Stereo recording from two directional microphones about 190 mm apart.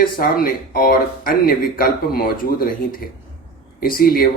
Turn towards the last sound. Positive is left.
turn(degrees=50)  # may be behind; listen again after turning